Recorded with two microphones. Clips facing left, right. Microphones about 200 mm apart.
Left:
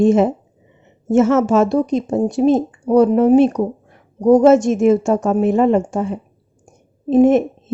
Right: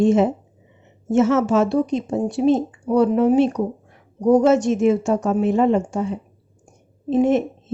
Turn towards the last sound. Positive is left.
turn(degrees=50)  # may be behind; listen again after turning